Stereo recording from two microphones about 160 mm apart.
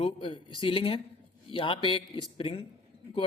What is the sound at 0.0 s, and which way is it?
Speech, 35° left (ahead or behind).